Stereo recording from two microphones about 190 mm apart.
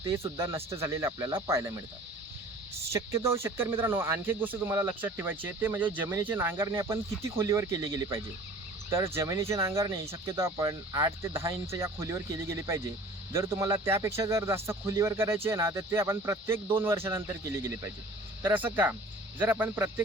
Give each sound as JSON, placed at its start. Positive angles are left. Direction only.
{"t": 0.0, "sound": "speech", "side_deg": -15}
{"t": 2.9, "sound": "speech", "side_deg": -15}